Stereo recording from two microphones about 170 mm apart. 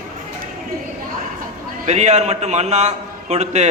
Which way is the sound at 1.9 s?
40° right (ahead or behind).